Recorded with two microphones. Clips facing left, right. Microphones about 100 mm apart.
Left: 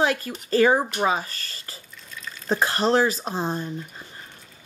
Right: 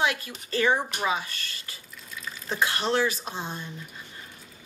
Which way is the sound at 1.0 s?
40° left (ahead or behind).